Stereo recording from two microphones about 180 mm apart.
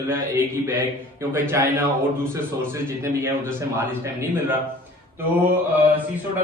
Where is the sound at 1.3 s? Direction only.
15° right (ahead or behind).